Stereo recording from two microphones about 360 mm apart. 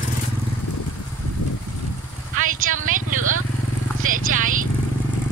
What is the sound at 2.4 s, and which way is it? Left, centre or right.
A woman's voice, right.